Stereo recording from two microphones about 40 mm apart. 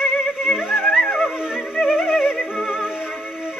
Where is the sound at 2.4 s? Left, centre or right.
Centre.